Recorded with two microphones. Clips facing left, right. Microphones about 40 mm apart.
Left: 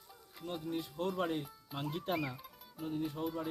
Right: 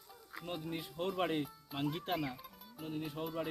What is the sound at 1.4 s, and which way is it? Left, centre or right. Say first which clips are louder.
Speech: right 3 dB; centre.